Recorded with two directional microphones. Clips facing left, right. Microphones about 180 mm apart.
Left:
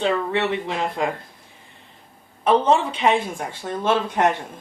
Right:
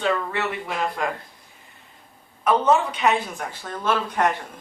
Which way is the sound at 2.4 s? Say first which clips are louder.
Left 2 dB; 30° left (ahead or behind).